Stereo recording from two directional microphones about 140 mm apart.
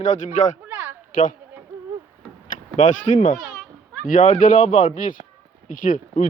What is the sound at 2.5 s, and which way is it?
Speech, 65° left (ahead or behind).